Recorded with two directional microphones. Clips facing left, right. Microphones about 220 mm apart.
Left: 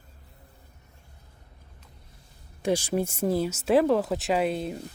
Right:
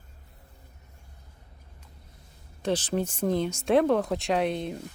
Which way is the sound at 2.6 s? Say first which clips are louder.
Left 2 dB; 10° left (ahead or behind).